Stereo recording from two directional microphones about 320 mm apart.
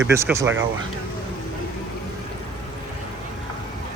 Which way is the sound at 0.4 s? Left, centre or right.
Right.